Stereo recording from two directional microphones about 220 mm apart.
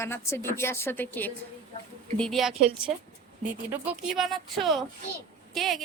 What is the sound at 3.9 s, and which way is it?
A woman's voice, centre (ahead or behind).